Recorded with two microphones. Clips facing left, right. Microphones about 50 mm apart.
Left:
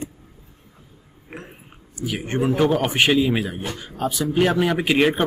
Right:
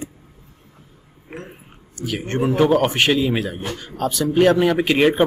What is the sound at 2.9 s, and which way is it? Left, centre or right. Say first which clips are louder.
Speech: even; centre.